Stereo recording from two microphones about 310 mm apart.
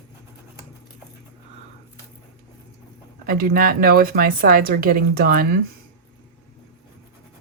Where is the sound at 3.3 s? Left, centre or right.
Right.